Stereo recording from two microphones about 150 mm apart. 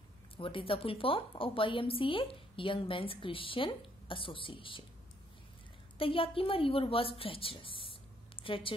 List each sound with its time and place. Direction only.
0.4 s a woman's voice: 35° left (ahead or behind)
5.9 s a woman's voice: 35° left (ahead or behind)